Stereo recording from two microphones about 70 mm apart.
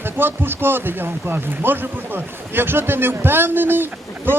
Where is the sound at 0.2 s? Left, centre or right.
Right.